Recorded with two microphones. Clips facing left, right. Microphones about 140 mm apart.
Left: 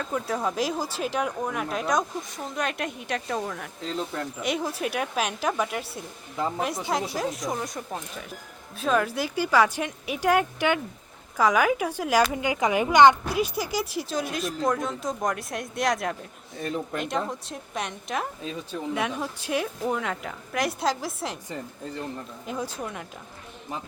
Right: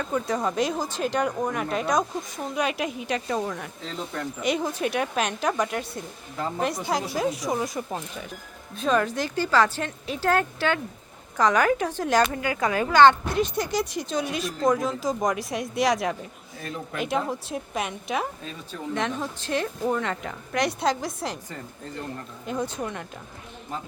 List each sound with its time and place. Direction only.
0.0 s speech: 5° left (ahead or behind)
18.9 s speech: 10° left (ahead or behind)
22.4 s speech: 5° left (ahead or behind)